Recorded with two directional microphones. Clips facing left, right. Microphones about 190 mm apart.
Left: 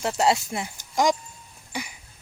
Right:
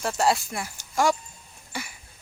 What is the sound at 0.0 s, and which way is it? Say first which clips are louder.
Speech: left 1 dB; 25° left (ahead or behind).